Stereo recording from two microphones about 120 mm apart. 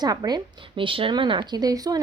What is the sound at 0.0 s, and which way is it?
A woman's voice, 35° right (ahead or behind).